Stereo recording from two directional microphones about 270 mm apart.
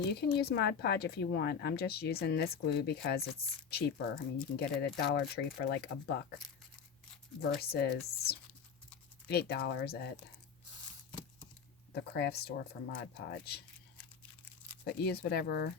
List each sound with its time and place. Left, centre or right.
0.1 s speech: left
7.6 s speech: left
12.1 s speech: left
14.8 s speech: left